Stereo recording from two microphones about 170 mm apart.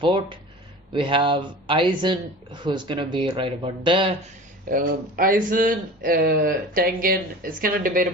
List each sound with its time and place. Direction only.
0.0 s speech: 30° right (ahead or behind)
4.7 s speech: 55° right (ahead or behind)